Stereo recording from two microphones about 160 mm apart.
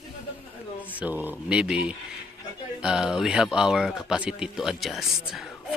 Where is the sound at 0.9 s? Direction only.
10° right (ahead or behind).